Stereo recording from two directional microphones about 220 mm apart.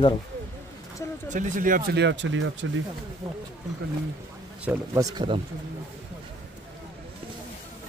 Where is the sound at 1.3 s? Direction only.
35° right (ahead or behind); by 2.6 s 60° right (ahead or behind).